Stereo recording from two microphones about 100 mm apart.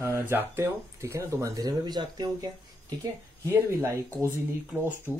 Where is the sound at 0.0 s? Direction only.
20° right (ahead or behind); by 2.2 s 45° right (ahead or behind).